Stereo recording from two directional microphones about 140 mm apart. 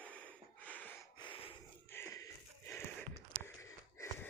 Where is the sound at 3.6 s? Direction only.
20° left (ahead or behind).